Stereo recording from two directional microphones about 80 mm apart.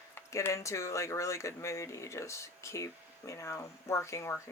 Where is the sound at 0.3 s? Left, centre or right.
Left.